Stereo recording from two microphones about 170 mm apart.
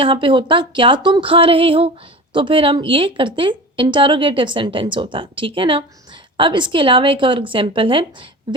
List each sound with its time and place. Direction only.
0.0 s a woman's voice: 30° right (ahead or behind)